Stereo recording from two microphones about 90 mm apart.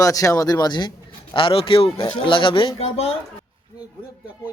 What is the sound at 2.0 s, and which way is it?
Speech, 65° left (ahead or behind).